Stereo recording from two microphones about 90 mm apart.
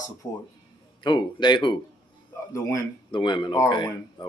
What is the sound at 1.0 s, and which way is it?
Speech, 60° left (ahead or behind).